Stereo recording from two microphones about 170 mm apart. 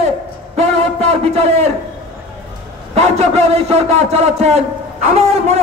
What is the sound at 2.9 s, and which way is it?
A man's voice, 40° right (ahead or behind).